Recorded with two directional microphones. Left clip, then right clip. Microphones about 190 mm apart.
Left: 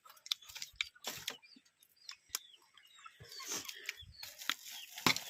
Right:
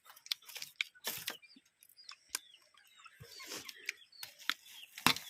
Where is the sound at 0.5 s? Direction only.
55° right (ahead or behind).